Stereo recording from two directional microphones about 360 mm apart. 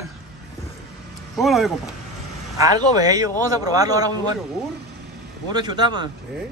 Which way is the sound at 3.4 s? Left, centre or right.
Centre.